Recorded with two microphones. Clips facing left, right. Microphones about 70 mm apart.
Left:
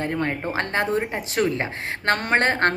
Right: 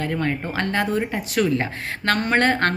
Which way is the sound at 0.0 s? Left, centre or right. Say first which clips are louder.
Right 1 dB; left.